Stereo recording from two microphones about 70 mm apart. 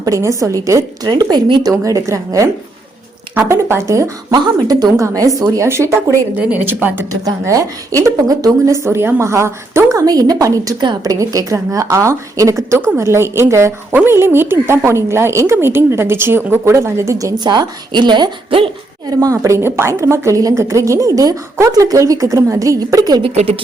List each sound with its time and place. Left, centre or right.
0.0 s a woman's voice: right
1.7 s a woman's voice: right
3.5 s a woman's voice: right
4.3 s a woman's voice: right
6.3 s a woman's voice: right
7.4 s a woman's voice: right
10.8 s speech: right
11.1 s a woman's voice: right
16.7 s a woman's voice: right
17.3 s speech: right
19.2 s a woman's voice: right